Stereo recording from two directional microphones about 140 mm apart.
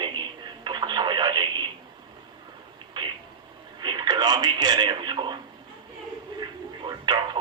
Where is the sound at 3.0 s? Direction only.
30° right (ahead or behind).